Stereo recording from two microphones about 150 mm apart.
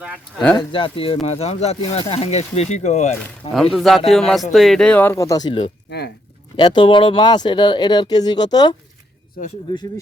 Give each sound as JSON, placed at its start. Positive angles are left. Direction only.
{"t": 0.0, "sound": "speech", "side_deg": -5}
{"t": 0.5, "sound": "speech", "side_deg": 35}
{"t": 3.5, "sound": "speech", "side_deg": 0}